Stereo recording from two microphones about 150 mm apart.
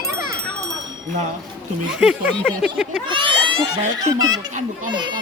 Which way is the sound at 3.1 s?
35° right (ahead or behind).